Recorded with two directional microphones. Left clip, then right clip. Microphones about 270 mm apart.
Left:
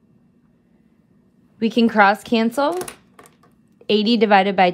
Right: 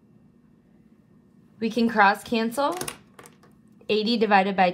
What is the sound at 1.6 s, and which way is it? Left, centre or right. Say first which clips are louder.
A woman's voice: left 5 dB; left.